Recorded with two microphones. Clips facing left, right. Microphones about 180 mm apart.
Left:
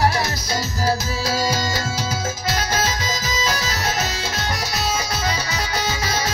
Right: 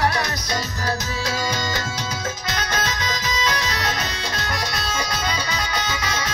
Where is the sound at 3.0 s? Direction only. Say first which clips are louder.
Even; 10° left (ahead or behind).